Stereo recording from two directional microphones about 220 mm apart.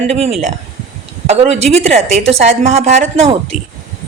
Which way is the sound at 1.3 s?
30° right (ahead or behind).